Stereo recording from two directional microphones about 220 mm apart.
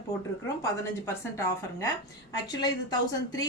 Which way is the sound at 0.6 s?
15° left (ahead or behind).